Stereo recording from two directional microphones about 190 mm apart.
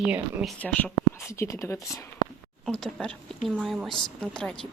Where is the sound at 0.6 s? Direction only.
10° left (ahead or behind).